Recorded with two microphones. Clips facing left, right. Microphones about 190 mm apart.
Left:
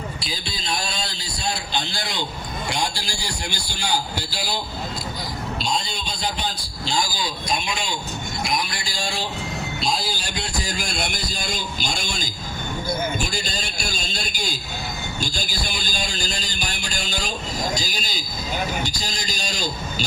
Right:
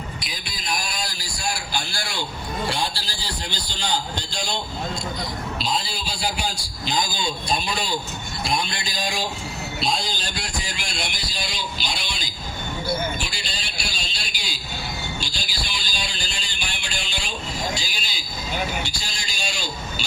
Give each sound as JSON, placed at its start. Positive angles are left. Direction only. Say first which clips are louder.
{"t": 0.2, "sound": "a man's voice", "louder": "left 4 dB", "side_deg": 30}
{"t": 5.6, "sound": "a man's voice", "louder": "even", "side_deg": -5}
{"t": 8.4, "sound": "music", "louder": "right 3 dB", "side_deg": -25}
{"t": 9.8, "sound": "music", "louder": "right 1 dB", "side_deg": 5}
{"t": 10.6, "sound": "a sound", "louder": "left 4 dB", "side_deg": 40}
{"t": 18.8, "sound": "a man's voice", "louder": "left 4 dB", "side_deg": 40}